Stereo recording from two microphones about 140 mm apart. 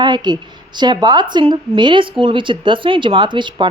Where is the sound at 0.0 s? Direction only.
30° right (ahead or behind).